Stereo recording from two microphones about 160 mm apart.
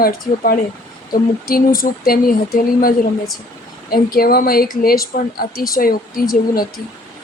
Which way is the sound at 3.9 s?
70° left (ahead or behind).